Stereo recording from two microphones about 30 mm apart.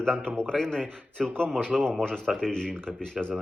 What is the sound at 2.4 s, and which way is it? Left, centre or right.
Speech, left.